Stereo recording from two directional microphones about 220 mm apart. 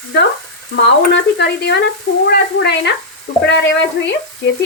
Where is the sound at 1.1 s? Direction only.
50° left (ahead or behind).